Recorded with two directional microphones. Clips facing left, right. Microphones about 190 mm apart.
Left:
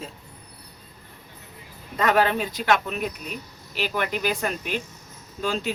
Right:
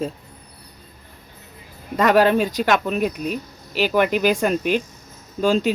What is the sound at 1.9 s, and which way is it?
Speech, 40° right (ahead or behind).